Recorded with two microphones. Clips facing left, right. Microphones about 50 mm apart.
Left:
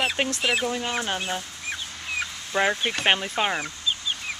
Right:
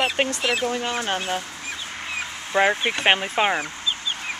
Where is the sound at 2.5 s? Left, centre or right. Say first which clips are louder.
Right 4 dB; centre.